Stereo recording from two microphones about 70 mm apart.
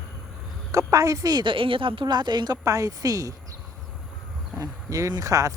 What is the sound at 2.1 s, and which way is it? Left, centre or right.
Speech, right.